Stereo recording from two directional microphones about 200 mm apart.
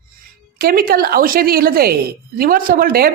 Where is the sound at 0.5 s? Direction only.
50° right (ahead or behind).